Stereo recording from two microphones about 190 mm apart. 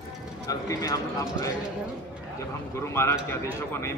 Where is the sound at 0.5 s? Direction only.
20° left (ahead or behind).